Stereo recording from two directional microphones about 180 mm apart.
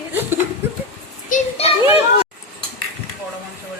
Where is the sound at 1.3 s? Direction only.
35° left (ahead or behind).